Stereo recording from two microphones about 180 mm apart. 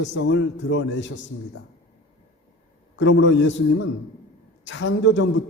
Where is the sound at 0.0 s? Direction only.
90° left.